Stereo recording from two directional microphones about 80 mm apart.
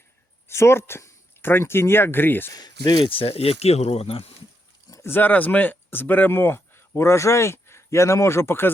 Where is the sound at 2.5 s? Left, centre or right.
Left.